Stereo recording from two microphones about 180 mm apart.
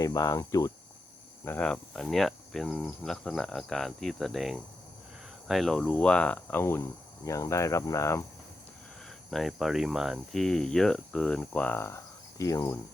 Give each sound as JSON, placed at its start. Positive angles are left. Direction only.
{"t": 0.0, "sound": "cricket", "side_deg": 20}
{"t": 1.5, "sound": "speech", "side_deg": 10}
{"t": 9.3, "sound": "speech", "side_deg": 0}